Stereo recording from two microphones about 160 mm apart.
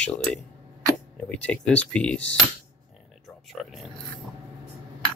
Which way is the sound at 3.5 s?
Centre (ahead or behind).